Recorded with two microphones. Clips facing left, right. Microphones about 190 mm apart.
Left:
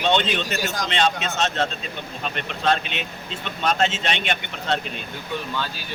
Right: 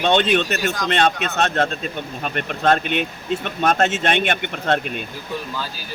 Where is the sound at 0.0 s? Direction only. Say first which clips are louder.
Right 4 dB; 55° right (ahead or behind).